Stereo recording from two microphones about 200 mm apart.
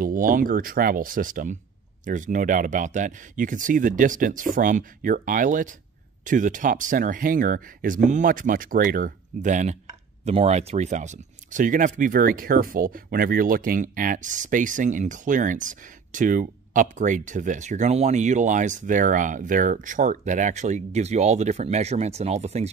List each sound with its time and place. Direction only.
0.0 s speech: 45° right (ahead or behind)